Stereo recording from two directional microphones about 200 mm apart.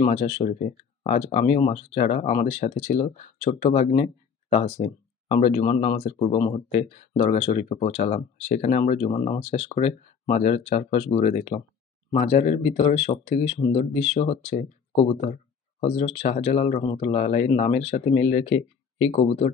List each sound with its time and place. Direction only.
0.0 s speech: 30° left (ahead or behind)